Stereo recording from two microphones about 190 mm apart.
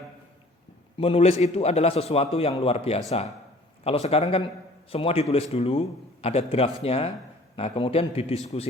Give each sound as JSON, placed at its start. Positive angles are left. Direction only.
{"t": 0.9, "sound": "a man's voice", "side_deg": 30}